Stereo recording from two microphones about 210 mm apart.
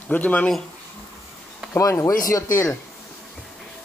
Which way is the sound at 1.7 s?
15° left (ahead or behind).